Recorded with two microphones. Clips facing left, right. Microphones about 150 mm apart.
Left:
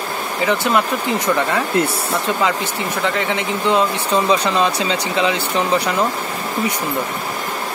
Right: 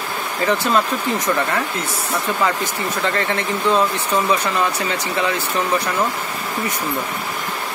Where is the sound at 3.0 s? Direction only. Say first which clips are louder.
Left 1 dB; 15° left (ahead or behind).